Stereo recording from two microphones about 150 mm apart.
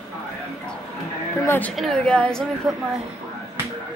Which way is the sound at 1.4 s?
15° left (ahead or behind).